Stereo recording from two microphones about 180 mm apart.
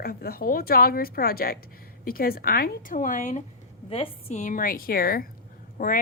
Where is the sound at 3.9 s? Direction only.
30° left (ahead or behind).